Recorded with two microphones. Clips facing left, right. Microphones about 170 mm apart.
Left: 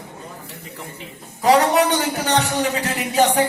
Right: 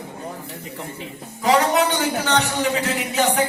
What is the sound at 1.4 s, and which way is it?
A man's voice, 35° left (ahead or behind).